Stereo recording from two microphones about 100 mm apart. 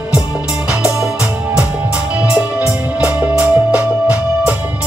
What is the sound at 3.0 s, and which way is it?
Music, 15° right (ahead or behind).